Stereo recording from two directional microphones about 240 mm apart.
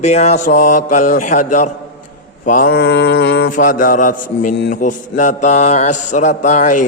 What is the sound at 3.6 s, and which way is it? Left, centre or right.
Mantra, left.